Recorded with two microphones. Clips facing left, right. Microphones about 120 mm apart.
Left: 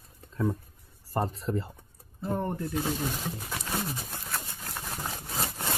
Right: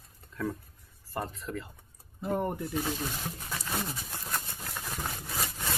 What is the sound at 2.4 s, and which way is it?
Speech, 10° right (ahead or behind).